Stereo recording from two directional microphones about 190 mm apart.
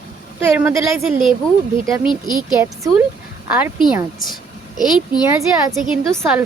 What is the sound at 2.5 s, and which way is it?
Speech, 15° right (ahead or behind).